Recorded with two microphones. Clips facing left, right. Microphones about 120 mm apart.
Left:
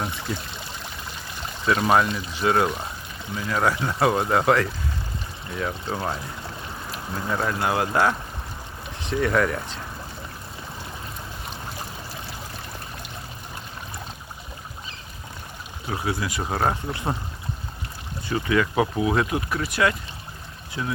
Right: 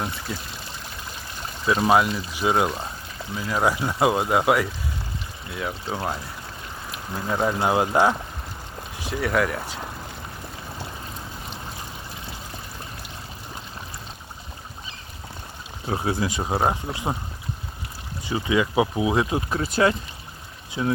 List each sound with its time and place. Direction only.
1.6 s speech: 10° right (ahead or behind)
7.3 s speech: 15° right (ahead or behind)
9.0 s speech: 5° right (ahead or behind)
15.9 s speech: 30° right (ahead or behind)
18.3 s speech: 15° right (ahead or behind)